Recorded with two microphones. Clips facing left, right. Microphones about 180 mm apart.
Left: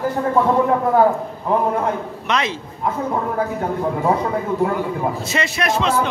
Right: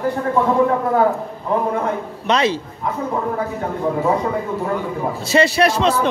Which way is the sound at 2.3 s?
35° right (ahead or behind).